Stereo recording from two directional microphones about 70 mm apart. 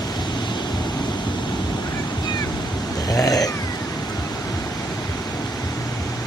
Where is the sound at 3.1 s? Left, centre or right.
Left.